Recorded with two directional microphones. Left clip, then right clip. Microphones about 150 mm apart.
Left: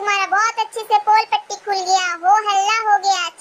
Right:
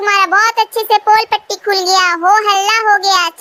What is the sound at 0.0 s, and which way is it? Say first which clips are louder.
A child's voice: right 7 dB; 50° right (ahead or behind).